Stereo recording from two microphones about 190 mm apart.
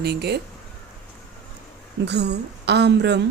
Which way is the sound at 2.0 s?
65° right (ahead or behind).